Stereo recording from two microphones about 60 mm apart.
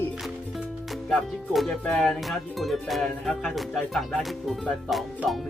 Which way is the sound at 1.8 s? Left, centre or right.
Centre.